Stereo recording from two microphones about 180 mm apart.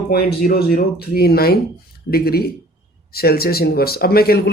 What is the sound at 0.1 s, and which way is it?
Speech, 60° left (ahead or behind).